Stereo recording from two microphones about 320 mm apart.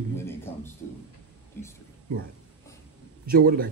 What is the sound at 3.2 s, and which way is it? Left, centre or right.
Speech, right.